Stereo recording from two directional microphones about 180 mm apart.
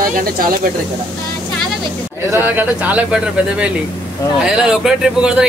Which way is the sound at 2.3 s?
10° right (ahead or behind).